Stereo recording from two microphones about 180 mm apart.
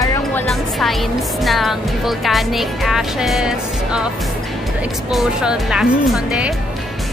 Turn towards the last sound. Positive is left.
turn(degrees=-5)  # may be behind; listen again after turning